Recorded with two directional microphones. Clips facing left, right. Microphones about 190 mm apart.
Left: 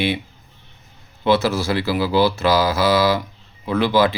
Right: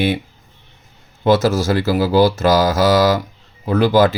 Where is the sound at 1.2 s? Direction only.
45° right (ahead or behind).